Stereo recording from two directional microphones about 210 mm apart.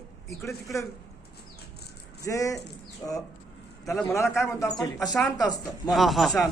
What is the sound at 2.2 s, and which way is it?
Speech, 15° left (ahead or behind).